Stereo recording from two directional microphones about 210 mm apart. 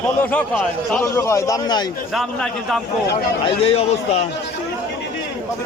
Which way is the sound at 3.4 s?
30° left (ahead or behind).